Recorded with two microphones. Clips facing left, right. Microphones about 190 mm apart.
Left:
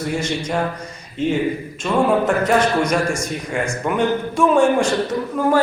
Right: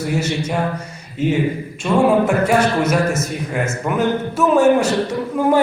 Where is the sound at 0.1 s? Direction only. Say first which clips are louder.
Right 1 dB; 10° right (ahead or behind).